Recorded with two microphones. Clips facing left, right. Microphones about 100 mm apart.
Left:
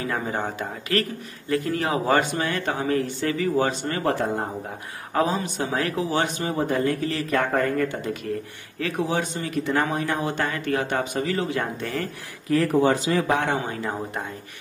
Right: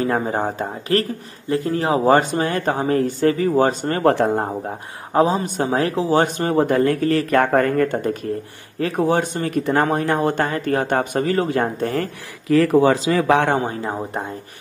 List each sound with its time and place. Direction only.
0.0 s speech: 40° right (ahead or behind)
5.1 s speech: 30° right (ahead or behind)
6.2 s speech: 50° right (ahead or behind)
6.6 s speech: 65° right (ahead or behind); by 12.1 s 45° right (ahead or behind)
12.4 s speech: 90° right
13.7 s speech: 25° right (ahead or behind)